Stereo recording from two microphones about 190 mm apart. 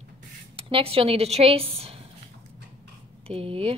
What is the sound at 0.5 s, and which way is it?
Speech, 30° right (ahead or behind).